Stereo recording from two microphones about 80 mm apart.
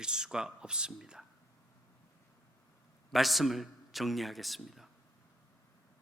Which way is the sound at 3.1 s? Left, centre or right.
Centre.